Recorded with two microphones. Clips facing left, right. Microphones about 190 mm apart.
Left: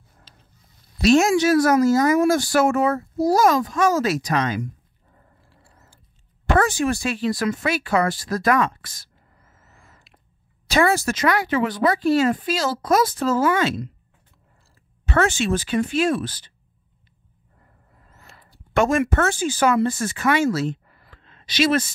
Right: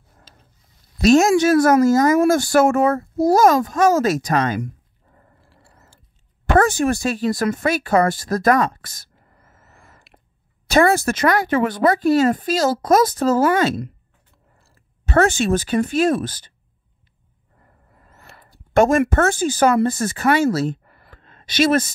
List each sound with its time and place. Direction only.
0.3 s mechanisms: 45° right (ahead or behind)
1.0 s speech: 45° right (ahead or behind)
5.5 s a sound: 70° right (ahead or behind)
6.6 s speech: 45° right (ahead or behind)
15.0 s speech: 40° right (ahead or behind)
18.0 s speech: 60° right (ahead or behind); by 20.9 s 40° right (ahead or behind)
20.9 s a sound: 55° right (ahead or behind)